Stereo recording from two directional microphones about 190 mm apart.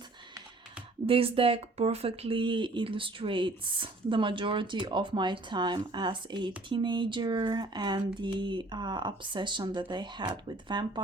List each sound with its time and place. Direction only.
1.0 s speech: 30° right (ahead or behind)